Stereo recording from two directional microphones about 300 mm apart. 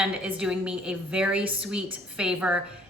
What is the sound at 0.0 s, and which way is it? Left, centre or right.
A woman's voice, centre.